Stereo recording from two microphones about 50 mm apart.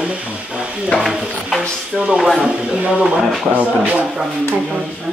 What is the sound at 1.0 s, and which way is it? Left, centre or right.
Speech, centre.